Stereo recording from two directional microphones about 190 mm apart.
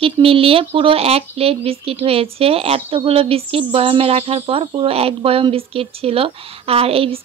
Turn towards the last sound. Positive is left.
turn(degrees=-30)  # may be behind; listen again after turning